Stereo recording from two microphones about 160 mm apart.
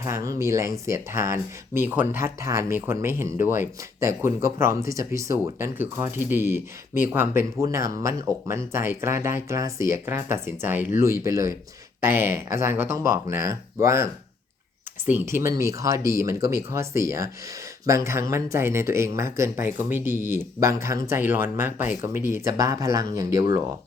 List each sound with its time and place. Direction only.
0.0 s speech: 20° right (ahead or behind)